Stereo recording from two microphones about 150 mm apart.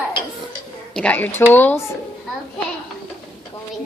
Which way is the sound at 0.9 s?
10° left (ahead or behind).